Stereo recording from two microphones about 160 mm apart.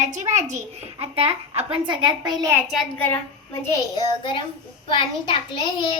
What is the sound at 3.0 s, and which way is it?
A child's voice, 15° left (ahead or behind).